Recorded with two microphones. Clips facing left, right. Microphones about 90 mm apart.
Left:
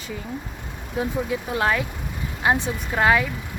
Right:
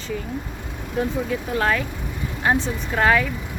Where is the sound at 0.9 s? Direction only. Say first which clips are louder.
Right 1 dB; 15° left (ahead or behind).